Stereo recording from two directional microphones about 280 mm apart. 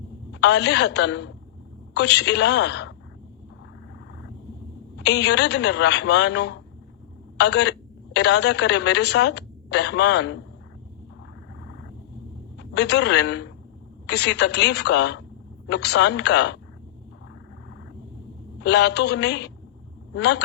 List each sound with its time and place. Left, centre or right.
0.3 s a woman's voice: left
4.9 s a woman's voice: left
12.5 s a woman's voice: left
18.6 s a woman's voice: left